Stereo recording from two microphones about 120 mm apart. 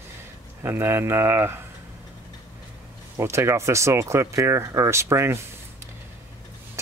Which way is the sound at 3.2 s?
20° right (ahead or behind).